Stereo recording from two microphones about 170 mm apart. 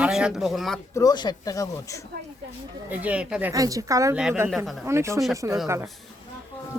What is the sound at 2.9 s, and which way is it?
Speech, 10° right (ahead or behind).